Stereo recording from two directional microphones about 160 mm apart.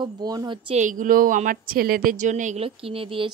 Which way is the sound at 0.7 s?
55° right (ahead or behind).